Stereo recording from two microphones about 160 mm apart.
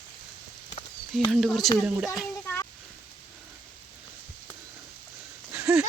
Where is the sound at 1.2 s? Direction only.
Centre (ahead or behind).